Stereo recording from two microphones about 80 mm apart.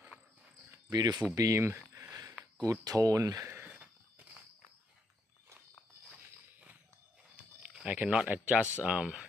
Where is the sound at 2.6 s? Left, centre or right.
Right.